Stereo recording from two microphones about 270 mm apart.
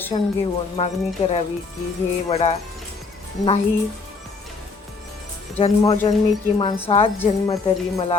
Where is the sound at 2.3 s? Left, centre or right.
Left.